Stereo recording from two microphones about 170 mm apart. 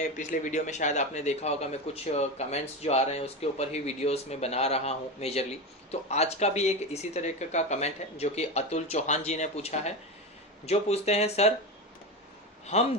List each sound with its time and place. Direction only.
0.2 s speech: 45° left (ahead or behind)